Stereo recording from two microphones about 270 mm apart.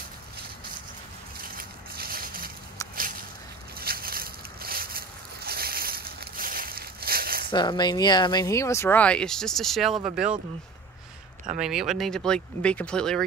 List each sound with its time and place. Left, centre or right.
1.4 s a sound: right
3.8 s boat: right
7.4 s speech: centre
11.6 s speech: centre